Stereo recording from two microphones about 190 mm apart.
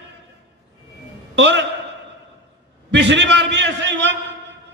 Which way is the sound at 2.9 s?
70° right (ahead or behind).